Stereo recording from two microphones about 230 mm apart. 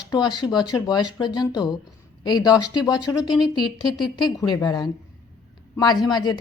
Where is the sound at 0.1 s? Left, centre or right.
Centre.